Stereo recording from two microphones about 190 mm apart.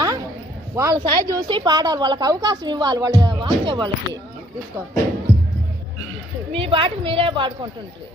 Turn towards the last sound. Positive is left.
turn(degrees=-25)  # may be behind; listen again after turning